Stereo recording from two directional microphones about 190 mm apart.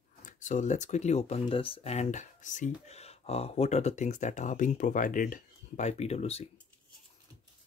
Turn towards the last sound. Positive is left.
turn(degrees=35)  # may be behind; listen again after turning